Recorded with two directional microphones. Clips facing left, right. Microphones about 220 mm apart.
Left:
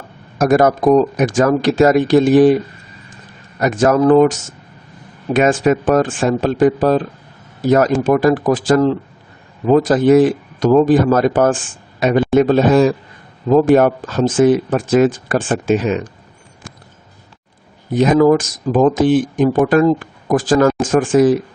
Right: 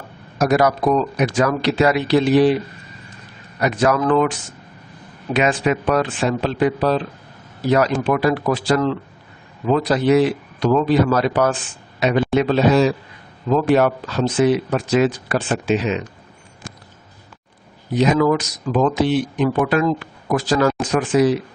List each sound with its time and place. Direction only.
0.3 s speech: 50° left (ahead or behind)
3.6 s speech: 45° left (ahead or behind)
17.9 s speech: 50° left (ahead or behind)